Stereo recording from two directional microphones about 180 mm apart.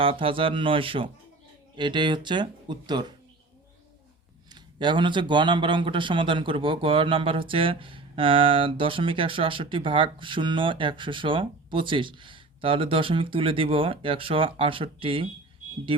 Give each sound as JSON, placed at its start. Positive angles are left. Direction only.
{"t": 0.0, "sound": "a man's voice", "side_deg": -30}
{"t": 4.8, "sound": "a man's voice", "side_deg": -25}